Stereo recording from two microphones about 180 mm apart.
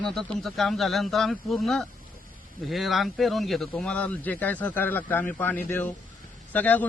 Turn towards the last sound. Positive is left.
turn(degrees=10)  # may be behind; listen again after turning